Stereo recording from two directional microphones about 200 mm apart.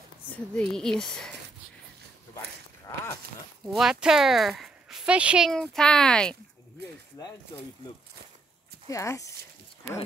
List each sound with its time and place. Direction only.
0.6 s speech: 5° left (ahead or behind)
3.6 s speech: 5° right (ahead or behind)
7.2 s speech: 20° left (ahead or behind)
8.8 s speech: 15° left (ahead or behind)